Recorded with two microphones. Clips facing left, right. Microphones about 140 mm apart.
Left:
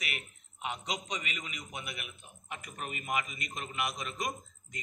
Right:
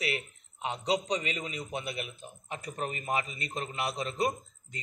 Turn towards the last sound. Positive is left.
turn(degrees=-30)  # may be behind; listen again after turning